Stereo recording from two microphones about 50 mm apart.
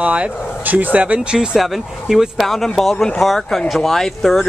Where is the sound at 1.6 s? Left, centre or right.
Centre.